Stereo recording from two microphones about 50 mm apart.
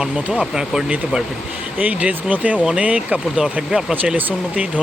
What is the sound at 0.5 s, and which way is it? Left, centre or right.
Speech, centre.